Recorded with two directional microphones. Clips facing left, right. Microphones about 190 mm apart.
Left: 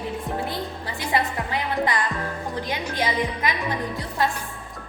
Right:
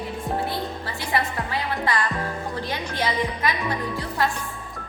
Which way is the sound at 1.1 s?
20° left (ahead or behind).